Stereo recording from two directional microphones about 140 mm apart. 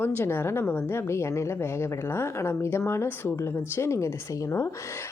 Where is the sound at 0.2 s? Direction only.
15° left (ahead or behind).